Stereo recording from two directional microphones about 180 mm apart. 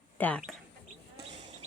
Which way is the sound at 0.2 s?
10° left (ahead or behind).